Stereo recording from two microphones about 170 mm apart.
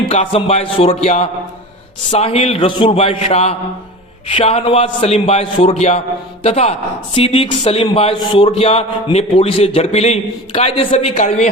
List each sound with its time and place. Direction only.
0.1 s speech: 35° left (ahead or behind)